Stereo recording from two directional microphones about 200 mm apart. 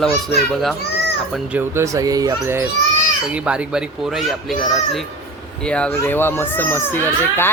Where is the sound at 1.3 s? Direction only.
5° right (ahead or behind).